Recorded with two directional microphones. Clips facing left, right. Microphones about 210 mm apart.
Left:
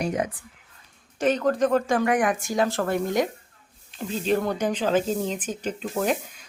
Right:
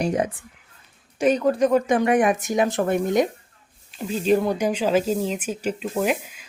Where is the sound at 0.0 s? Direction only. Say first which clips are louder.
Right 3 dB; 30° right (ahead or behind).